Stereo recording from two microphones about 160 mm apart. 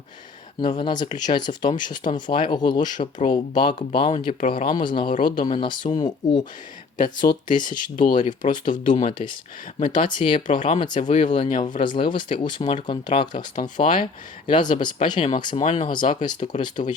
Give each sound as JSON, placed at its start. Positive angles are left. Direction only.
{"t": 0.6, "sound": "speech", "side_deg": 30}
{"t": 4.4, "sound": "speech", "side_deg": 60}
{"t": 4.8, "sound": "speech", "side_deg": 30}
{"t": 6.9, "sound": "speech", "side_deg": 55}
{"t": 7.4, "sound": "speech", "side_deg": 30}
{"t": 7.8, "sound": "speech", "side_deg": 55}
{"t": 10.2, "sound": "speech", "side_deg": 30}
{"t": 10.9, "sound": "speech", "side_deg": 50}
{"t": 11.3, "sound": "speech", "side_deg": 30}
{"t": 13.3, "sound": "speech", "side_deg": 50}
{"t": 13.8, "sound": "speech", "side_deg": 30}
{"t": 15.6, "sound": "speech", "side_deg": 45}